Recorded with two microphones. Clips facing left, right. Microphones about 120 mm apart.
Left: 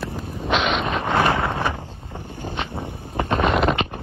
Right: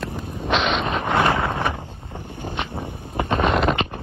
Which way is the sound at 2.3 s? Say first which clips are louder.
Even; 20° right (ahead or behind).